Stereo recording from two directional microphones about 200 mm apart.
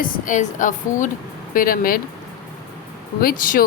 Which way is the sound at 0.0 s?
40° left (ahead or behind).